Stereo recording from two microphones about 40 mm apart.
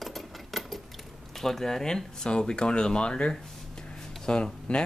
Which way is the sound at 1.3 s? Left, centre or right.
Centre.